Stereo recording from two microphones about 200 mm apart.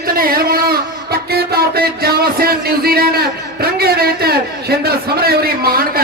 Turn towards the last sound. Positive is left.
turn(degrees=-50)  # may be behind; listen again after turning